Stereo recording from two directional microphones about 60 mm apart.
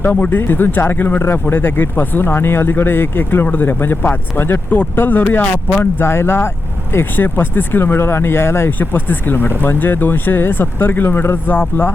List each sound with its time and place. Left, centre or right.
0.0 s speech: left